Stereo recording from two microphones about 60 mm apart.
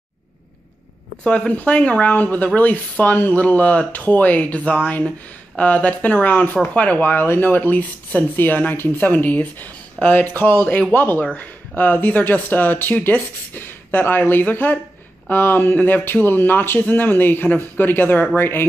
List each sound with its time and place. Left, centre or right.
1.2 s speech: centre
7.0 s speech: left